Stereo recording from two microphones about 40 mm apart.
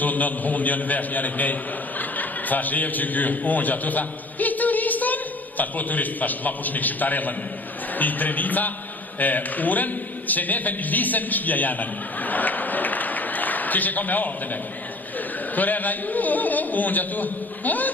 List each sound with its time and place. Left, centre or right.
0.0 s a man's voice: left